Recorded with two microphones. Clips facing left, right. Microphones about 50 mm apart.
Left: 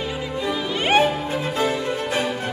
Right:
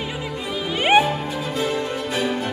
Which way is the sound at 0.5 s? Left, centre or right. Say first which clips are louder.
Right 3 dB; centre.